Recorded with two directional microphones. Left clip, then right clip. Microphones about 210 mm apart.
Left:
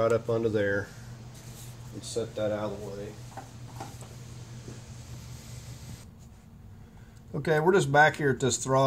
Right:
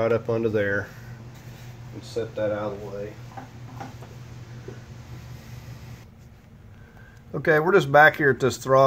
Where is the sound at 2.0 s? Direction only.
20° left (ahead or behind).